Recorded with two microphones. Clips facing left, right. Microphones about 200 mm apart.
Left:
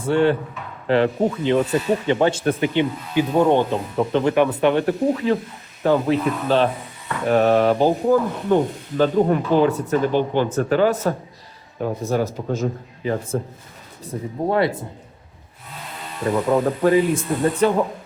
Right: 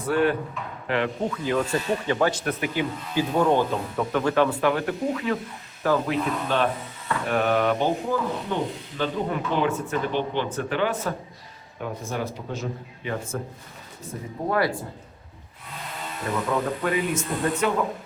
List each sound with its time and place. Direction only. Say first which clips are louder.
0.0 s speech: left 4 dB; 25° left (ahead or behind)
8.5 s speech: left 9 dB; 50° left (ahead or behind)
13.1 s speech: left 7 dB; 35° left (ahead or behind)
16.5 s speech: left 9 dB; 35° left (ahead or behind)